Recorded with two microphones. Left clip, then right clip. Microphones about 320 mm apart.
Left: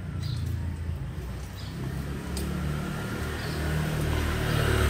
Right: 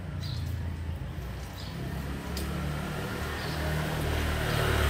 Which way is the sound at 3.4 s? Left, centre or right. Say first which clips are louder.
Even; right.